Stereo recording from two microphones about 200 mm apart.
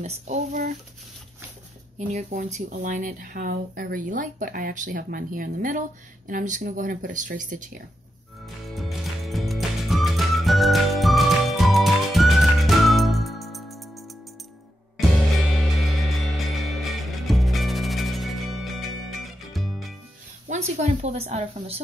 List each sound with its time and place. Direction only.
0.0 s speech: 40° right (ahead or behind)
2.0 s speech: 35° right (ahead or behind)
8.6 s music: centre (ahead or behind)
16.2 s music: centre (ahead or behind)
20.4 s speech: 35° right (ahead or behind)